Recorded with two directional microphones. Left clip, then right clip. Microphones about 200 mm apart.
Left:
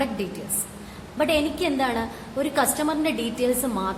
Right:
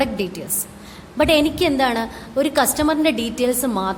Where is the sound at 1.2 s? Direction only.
45° right (ahead or behind).